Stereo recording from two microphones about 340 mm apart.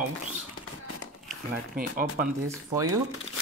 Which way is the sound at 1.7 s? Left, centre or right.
Right.